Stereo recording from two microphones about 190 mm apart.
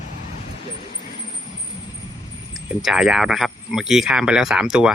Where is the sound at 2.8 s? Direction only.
5° right (ahead or behind).